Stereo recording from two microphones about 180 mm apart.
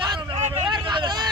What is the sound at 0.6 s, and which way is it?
Hubbub, 25° right (ahead or behind).